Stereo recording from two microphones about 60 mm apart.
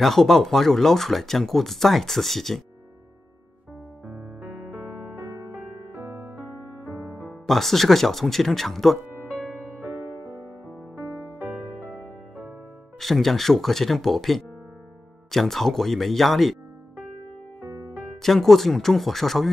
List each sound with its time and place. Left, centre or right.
0.0 s speech: centre
4.4 s music: right
7.4 s speech: centre
11.3 s music: right
13.0 s speech: centre
18.2 s speech: centre